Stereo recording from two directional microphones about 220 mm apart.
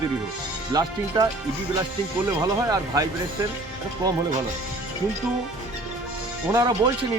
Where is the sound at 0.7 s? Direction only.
15° right (ahead or behind).